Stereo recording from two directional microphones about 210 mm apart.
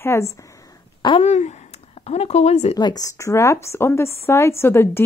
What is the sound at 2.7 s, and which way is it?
Speech, 20° left (ahead or behind).